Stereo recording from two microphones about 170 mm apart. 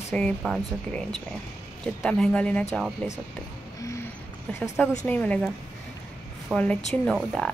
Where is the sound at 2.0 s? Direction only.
5° left (ahead or behind).